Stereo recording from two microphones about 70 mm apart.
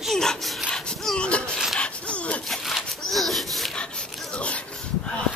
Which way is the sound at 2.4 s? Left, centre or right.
Centre.